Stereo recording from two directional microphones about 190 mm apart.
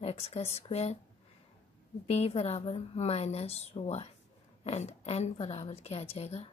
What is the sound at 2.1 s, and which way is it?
A woman's voice, 30° left (ahead or behind).